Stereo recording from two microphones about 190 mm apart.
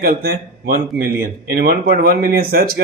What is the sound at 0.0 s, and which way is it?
Speech, 55° right (ahead or behind).